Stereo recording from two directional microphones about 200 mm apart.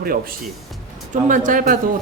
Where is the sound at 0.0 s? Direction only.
45° right (ahead or behind).